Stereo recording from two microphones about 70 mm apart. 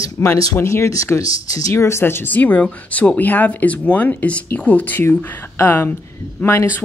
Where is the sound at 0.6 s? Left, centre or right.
Left.